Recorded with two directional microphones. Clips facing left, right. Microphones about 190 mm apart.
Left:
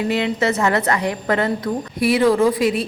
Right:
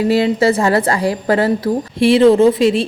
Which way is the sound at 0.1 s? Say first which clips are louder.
Right 6 dB; 35° right (ahead or behind).